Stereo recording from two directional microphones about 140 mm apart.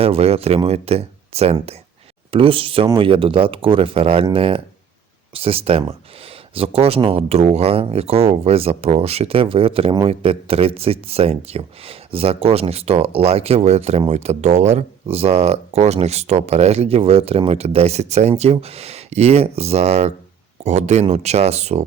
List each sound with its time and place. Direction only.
0.0 s speech: 45° right (ahead or behind)